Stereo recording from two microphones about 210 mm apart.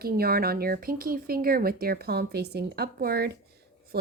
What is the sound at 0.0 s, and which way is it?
Speech, 45° right (ahead or behind).